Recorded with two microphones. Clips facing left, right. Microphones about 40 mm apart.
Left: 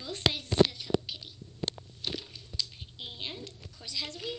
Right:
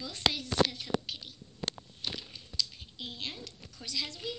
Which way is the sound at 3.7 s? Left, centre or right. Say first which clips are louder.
Right 1 dB; centre.